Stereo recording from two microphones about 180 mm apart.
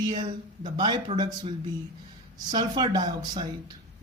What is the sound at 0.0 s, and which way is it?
Speech, 25° right (ahead or behind).